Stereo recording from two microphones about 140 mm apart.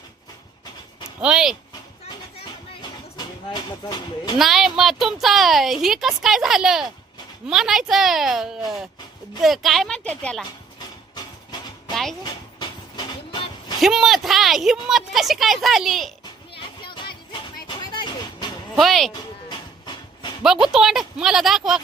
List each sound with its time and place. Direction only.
1.2 s a woman's voice: 5° right (ahead or behind)
4.4 s a woman's voice: centre (ahead or behind)
13.3 s a sound: 35° left (ahead or behind)
13.8 s a woman's voice: centre (ahead or behind)
16.8 s music: 35° left (ahead or behind)
17.9 s a sound: 35° left (ahead or behind)
18.8 s a woman's voice: centre (ahead or behind)
20.4 s a woman's voice: 5° right (ahead or behind)